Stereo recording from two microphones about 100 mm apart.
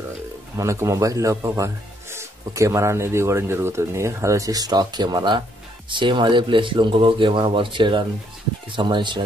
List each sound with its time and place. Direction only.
0.6 s speech: 30° right (ahead or behind); by 9.2 s 50° right (ahead or behind)